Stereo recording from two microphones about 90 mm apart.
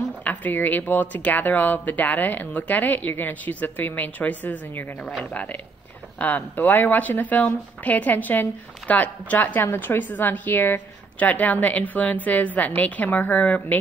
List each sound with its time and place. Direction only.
0.2 s speech: 20° left (ahead or behind)